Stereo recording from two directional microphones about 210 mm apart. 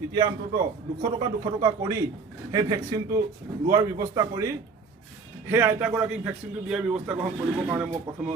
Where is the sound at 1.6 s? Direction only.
20° right (ahead or behind).